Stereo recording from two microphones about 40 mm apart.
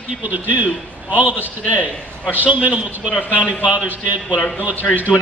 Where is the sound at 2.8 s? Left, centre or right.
Right.